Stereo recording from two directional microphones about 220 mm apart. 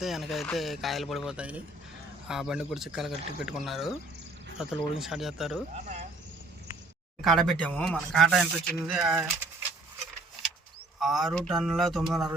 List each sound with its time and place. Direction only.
0.0 s speech: centre (ahead or behind)
5.7 s speech: 35° right (ahead or behind)
7.3 s speech: centre (ahead or behind)
11.0 s speech: centre (ahead or behind)